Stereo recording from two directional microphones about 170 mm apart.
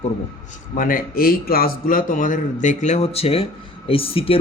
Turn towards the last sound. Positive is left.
turn(degrees=35)  # may be behind; listen again after turning